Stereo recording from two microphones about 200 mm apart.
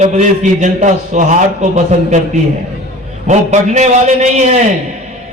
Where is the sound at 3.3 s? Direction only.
35° right (ahead or behind).